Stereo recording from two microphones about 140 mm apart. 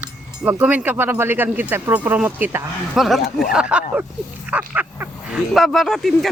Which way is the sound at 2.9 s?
Centre (ahead or behind).